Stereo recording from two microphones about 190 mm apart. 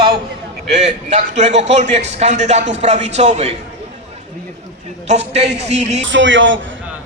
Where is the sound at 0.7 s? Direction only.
35° right (ahead or behind).